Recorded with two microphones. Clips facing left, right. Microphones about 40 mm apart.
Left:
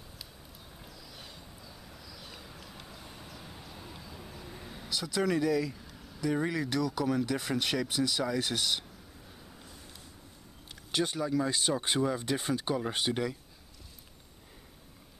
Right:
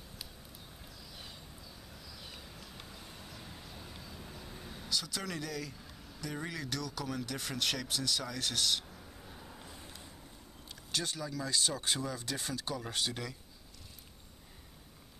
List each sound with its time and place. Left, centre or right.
1.9 s vehicle: centre
6.2 s speech: centre
9.3 s vehicle: centre
10.9 s speech: left